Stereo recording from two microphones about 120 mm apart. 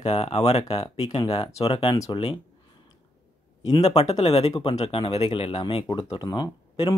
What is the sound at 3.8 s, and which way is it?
Speech, 65° left (ahead or behind).